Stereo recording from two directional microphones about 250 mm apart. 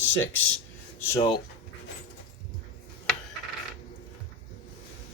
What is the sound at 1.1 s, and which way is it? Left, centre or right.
Speech, centre.